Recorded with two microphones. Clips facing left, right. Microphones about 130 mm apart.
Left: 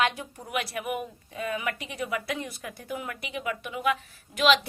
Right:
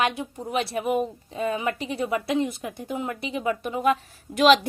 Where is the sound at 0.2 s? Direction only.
25° right (ahead or behind).